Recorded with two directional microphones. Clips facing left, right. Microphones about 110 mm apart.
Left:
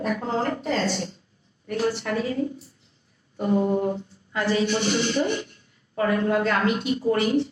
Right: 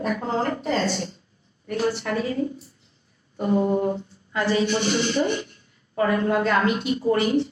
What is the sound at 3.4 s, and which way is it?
Speech, 30° right (ahead or behind).